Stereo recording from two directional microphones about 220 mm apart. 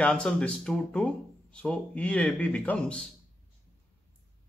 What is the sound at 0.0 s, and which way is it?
Speech, 5° left (ahead or behind).